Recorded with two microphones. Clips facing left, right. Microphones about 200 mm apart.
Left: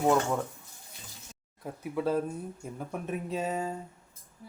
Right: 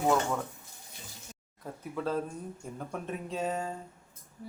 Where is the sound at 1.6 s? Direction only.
10° left (ahead or behind).